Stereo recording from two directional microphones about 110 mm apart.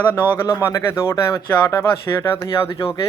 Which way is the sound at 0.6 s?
25° left (ahead or behind).